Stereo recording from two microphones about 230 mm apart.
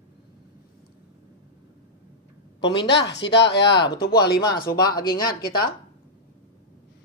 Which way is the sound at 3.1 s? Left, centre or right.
Left.